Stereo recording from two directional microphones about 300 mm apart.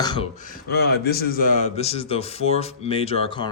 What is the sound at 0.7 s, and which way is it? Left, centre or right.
Speech, left.